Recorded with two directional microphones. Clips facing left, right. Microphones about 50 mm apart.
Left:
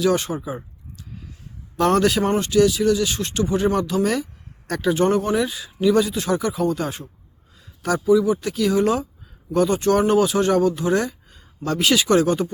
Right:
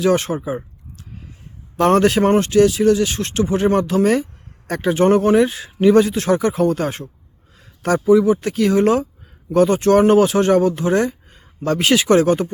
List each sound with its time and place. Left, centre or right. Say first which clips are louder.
0.0 s speech: right 3 dB; right